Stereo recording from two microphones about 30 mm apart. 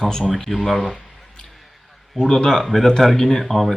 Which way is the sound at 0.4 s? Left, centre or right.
Centre.